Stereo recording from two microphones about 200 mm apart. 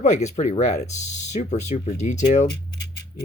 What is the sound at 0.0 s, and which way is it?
Speech, 35° left (ahead or behind).